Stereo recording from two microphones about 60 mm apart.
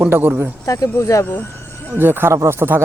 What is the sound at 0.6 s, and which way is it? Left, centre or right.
Speech, left.